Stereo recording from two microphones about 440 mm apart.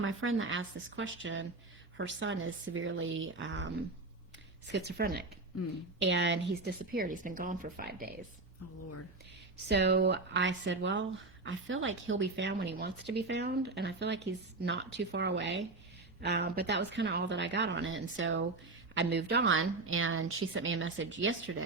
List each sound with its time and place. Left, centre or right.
0.0 s a woman's voice: right
4.9 s a woman's voice: right
9.6 s a woman's voice: right